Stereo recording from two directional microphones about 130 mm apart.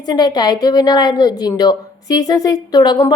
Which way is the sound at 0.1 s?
30° left (ahead or behind).